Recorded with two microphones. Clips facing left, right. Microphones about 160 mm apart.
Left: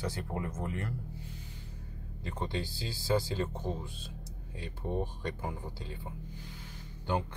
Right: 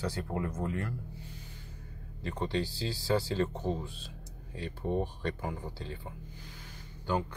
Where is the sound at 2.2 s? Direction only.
20° left (ahead or behind).